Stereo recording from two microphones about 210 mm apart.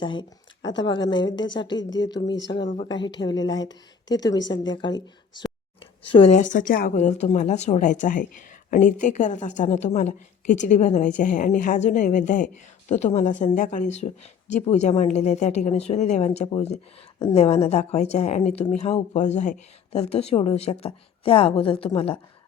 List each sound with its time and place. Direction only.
0.0 s speech: 20° left (ahead or behind)
6.1 s speech: 25° left (ahead or behind)
6.4 s speech: 40° left (ahead or behind)